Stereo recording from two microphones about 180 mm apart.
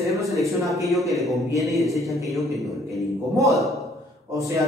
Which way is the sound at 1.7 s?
Centre (ahead or behind).